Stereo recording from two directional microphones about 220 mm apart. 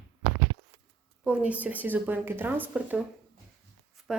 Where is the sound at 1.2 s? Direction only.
5° right (ahead or behind).